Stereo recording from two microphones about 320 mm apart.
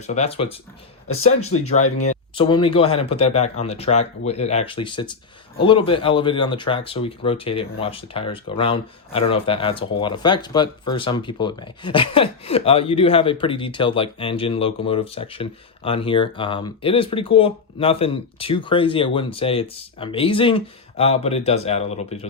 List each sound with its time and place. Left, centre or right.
0.1 s speech: centre
1.3 s speech: left
1.6 s speech: left